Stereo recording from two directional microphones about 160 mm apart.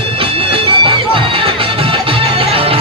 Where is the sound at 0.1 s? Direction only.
35° right (ahead or behind).